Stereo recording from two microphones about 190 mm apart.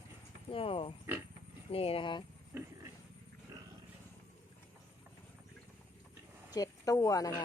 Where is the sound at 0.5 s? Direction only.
30° left (ahead or behind).